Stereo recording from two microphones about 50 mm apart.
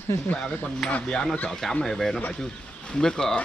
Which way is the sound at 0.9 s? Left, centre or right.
Centre.